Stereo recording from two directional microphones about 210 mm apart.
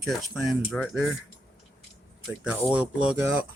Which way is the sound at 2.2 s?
5° right (ahead or behind).